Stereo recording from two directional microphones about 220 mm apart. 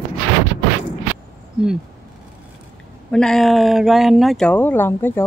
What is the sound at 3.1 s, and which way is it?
Speech, 5° left (ahead or behind).